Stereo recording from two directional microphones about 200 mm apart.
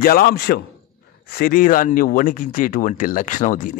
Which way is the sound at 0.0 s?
45° left (ahead or behind).